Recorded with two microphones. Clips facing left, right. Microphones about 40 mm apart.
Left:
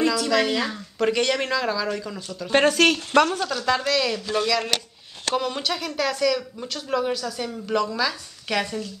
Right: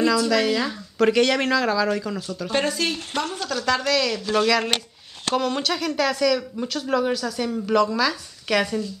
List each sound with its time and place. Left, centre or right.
0.3 s speech: centre
1.0 s speech: centre
2.8 s speech: left
3.5 s speech: centre
4.4 s speech: centre
5.3 s speech: centre